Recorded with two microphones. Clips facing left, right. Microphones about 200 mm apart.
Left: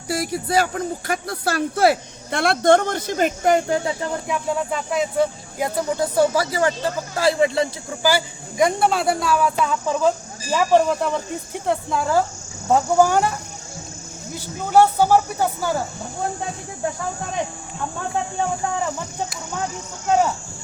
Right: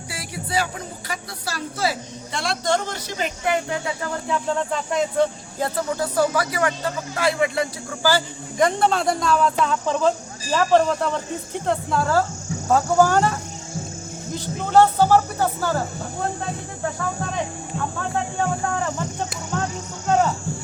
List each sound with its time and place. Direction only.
0.1 s speech: 40° left (ahead or behind)
4.0 s speech: 10° left (ahead or behind)
6.1 s speech: 25° left (ahead or behind)
8.0 s speech: 10° left (ahead or behind)
14.3 s speech: 10° left (ahead or behind)